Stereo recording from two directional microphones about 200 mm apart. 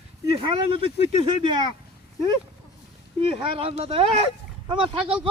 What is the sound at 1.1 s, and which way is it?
Speech, 25° right (ahead or behind).